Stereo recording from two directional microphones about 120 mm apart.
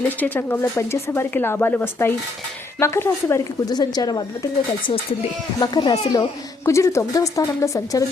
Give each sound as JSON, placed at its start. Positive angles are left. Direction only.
{"t": 0.2, "sound": "speech", "side_deg": 15}
{"t": 3.7, "sound": "speech", "side_deg": 35}
{"t": 5.5, "sound": "speech", "side_deg": 35}
{"t": 6.7, "sound": "speech", "side_deg": 25}